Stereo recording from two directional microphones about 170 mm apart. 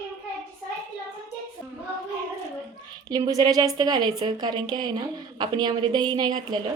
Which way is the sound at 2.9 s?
20° right (ahead or behind).